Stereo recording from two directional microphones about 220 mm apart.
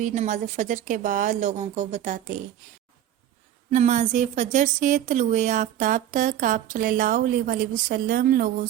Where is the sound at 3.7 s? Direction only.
35° right (ahead or behind).